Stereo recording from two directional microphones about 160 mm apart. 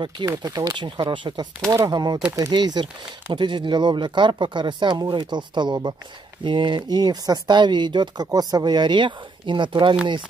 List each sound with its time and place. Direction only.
0.0 s speech: 25° right (ahead or behind)